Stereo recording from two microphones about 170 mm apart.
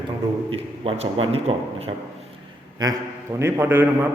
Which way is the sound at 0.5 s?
35° right (ahead or behind).